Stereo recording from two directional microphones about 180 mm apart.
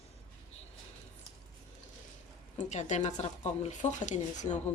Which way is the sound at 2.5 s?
40° left (ahead or behind).